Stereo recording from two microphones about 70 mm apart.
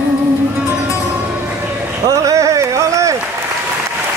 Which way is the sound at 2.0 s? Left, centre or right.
Right.